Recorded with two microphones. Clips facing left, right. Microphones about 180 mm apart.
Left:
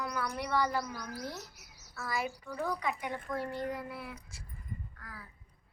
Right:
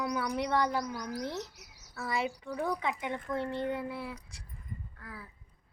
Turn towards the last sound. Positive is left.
turn(degrees=-25)  # may be behind; listen again after turning